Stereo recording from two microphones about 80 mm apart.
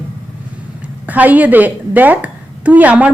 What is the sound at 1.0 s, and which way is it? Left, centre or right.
A woman's voice, centre.